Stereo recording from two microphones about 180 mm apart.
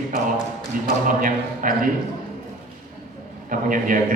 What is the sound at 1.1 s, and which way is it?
Speech, 50° right (ahead or behind).